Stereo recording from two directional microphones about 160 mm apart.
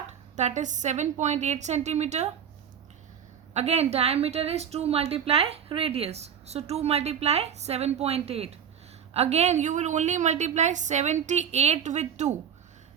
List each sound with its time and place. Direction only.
0.3 s a woman's voice: 45° right (ahead or behind)
3.5 s a woman's voice: 40° right (ahead or behind)